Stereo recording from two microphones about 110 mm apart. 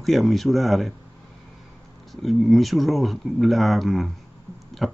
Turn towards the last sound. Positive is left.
turn(degrees=0)  # may be behind; listen again after turning